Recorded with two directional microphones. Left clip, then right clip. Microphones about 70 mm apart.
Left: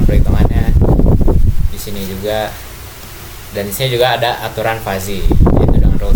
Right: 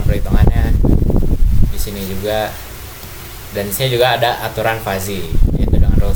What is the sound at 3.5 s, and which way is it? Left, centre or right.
Speech, centre.